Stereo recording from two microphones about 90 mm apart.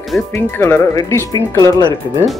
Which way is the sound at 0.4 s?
25° left (ahead or behind).